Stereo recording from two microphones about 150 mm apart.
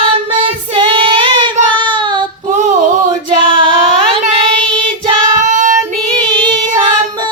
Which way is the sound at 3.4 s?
35° right (ahead or behind).